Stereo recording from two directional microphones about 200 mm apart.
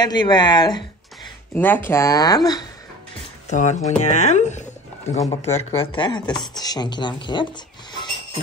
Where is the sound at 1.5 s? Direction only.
10° left (ahead or behind).